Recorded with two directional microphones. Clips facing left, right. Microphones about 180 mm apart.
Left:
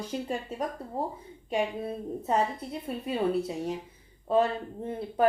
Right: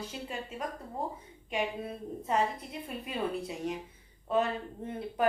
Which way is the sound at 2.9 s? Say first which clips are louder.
Left 5 dB; 35° left (ahead or behind).